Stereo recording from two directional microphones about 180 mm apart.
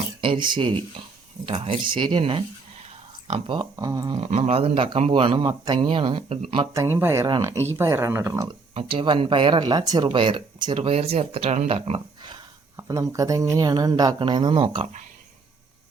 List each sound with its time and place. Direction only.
0.2 s speech: 25° right (ahead or behind)
6.8 s speech: 15° right (ahead or behind)
8.7 s speech: 30° right (ahead or behind)